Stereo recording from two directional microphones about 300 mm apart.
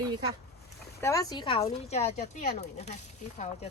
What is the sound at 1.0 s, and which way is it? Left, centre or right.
Speech, centre.